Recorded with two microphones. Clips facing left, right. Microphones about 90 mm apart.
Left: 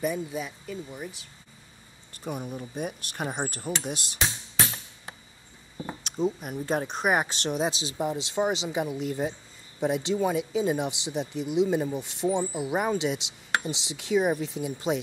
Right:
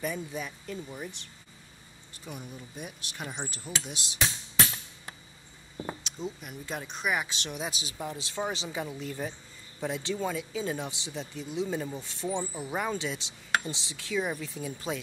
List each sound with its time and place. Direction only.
0.0 s speech: 10° left (ahead or behind)
2.1 s speech: 50° left (ahead or behind)
6.0 s speech: 50° left (ahead or behind); by 7.9 s 35° left (ahead or behind)
8.0 s speech: 20° left (ahead or behind)